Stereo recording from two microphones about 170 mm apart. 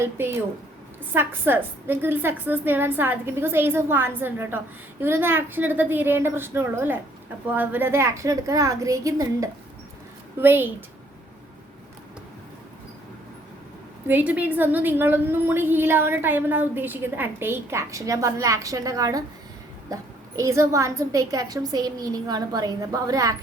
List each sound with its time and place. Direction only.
1.1 s a woman's voice: 10° right (ahead or behind)
14.1 s a woman's voice: 10° right (ahead or behind)